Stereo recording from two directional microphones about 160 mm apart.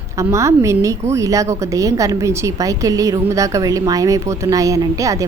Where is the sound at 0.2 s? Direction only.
20° right (ahead or behind).